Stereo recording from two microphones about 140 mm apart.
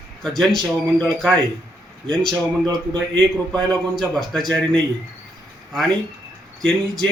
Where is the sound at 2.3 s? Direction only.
30° right (ahead or behind).